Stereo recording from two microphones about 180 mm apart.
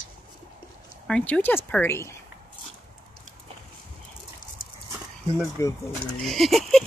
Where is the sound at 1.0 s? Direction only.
5° left (ahead or behind).